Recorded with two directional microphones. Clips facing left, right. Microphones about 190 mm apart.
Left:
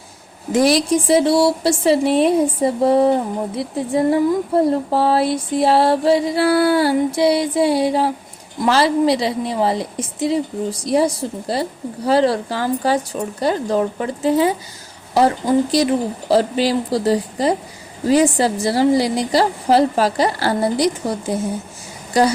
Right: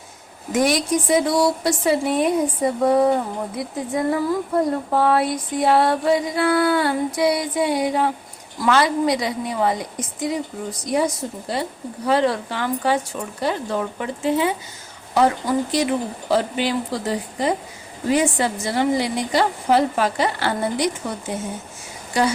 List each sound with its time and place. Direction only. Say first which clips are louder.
0.5 s speech: left 4 dB; 30° left (ahead or behind)